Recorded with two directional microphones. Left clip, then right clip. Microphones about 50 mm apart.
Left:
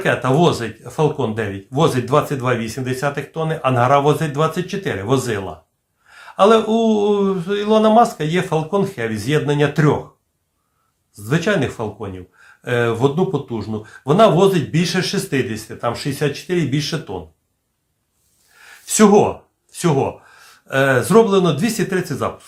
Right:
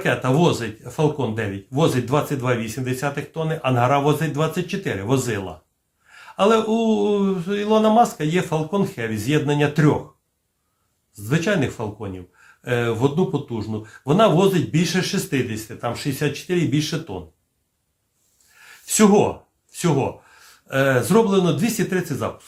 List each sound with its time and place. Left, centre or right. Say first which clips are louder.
0.0 s speech: left 4 dB; left
11.1 s speech: left 3 dB; left
16.2 s speech: left 4 dB; centre
16.5 s speech: left 2 dB; left
18.6 s a sound: left 4 dB; left
19.7 s speech: left 4 dB; left